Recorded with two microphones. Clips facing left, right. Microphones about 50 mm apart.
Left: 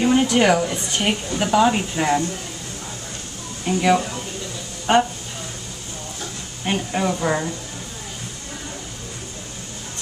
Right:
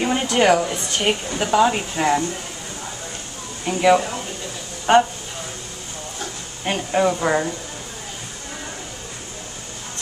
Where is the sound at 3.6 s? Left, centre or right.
Centre.